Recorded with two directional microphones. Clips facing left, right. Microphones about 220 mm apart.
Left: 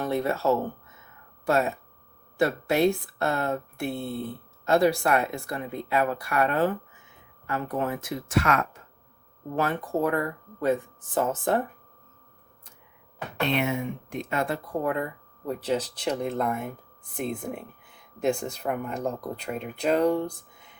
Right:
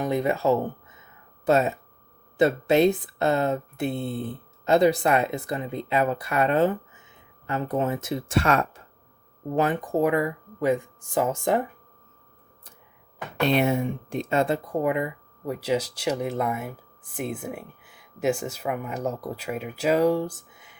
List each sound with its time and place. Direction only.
0.0 s speech: 15° right (ahead or behind)
9.6 s speech: 15° right (ahead or behind)
13.5 s speech: 35° right (ahead or behind); by 20.7 s 5° right (ahead or behind)